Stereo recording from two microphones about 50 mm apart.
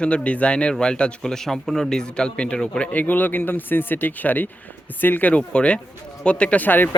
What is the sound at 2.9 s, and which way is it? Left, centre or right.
Speech, left.